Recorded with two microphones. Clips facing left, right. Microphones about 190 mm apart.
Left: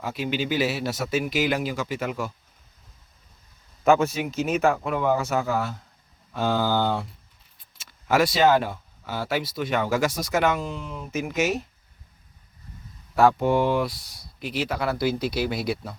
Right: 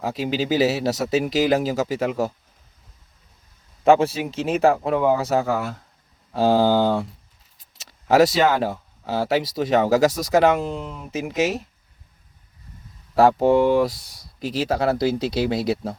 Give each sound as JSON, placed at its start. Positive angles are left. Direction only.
{"t": 0.0, "sound": "speech", "side_deg": -35}
{"t": 3.8, "sound": "speech", "side_deg": -30}
{"t": 7.8, "sound": "speech", "side_deg": -35}
{"t": 13.1, "sound": "speech", "side_deg": -35}